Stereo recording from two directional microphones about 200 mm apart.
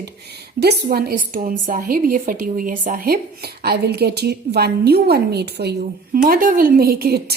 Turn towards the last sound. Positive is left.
turn(degrees=-50)  # may be behind; listen again after turning